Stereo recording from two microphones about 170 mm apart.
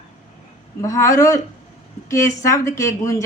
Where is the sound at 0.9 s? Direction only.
20° left (ahead or behind).